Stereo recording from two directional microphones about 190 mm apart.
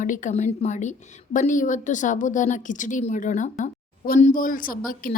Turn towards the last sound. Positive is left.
turn(degrees=45)  # may be behind; listen again after turning